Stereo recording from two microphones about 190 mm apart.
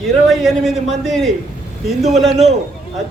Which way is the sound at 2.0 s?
35° right (ahead or behind).